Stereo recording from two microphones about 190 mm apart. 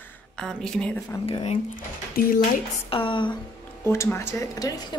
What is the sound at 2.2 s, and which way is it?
Speech, 50° left (ahead or behind).